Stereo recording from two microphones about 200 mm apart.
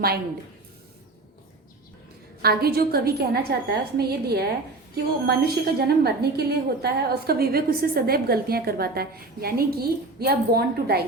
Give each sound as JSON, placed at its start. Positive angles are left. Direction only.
{"t": 2.4, "sound": "a woman's voice", "side_deg": -50}